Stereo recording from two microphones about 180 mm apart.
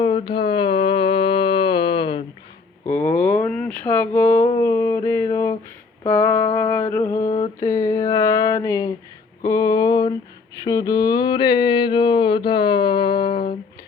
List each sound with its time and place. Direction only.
0.0 s mantra: 25° left (ahead or behind)
2.8 s a sound: 10° left (ahead or behind)
10.6 s mantra: 20° left (ahead or behind)